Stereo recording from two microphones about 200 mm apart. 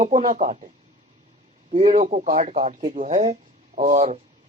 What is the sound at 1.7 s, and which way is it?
A man's voice, 30° right (ahead or behind).